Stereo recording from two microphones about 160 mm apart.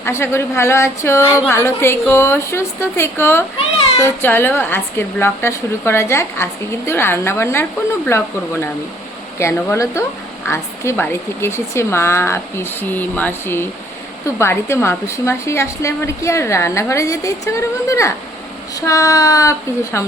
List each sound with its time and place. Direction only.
0.0 s a woman's voice: 15° left (ahead or behind)
9.4 s a woman's voice: 20° left (ahead or behind)